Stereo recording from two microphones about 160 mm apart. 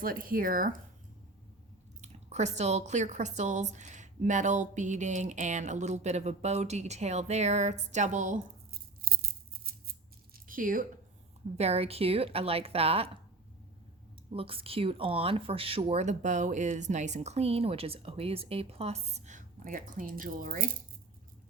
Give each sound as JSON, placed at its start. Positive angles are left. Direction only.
{"t": 0.0, "sound": "speech", "side_deg": -60}
{"t": 2.0, "sound": "speech", "side_deg": -45}
{"t": 9.1, "sound": "music", "side_deg": -75}
{"t": 9.7, "sound": "scissors", "side_deg": -75}
{"t": 10.3, "sound": "a sound", "side_deg": -60}
{"t": 11.5, "sound": "speech", "side_deg": -40}
{"t": 14.3, "sound": "speech", "side_deg": -35}